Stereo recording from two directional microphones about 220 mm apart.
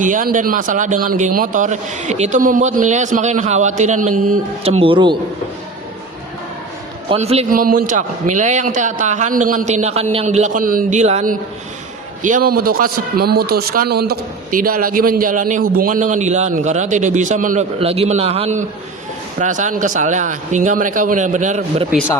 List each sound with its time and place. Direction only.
0.0 s speech: 35° right (ahead or behind)
7.1 s speech: 30° right (ahead or behind)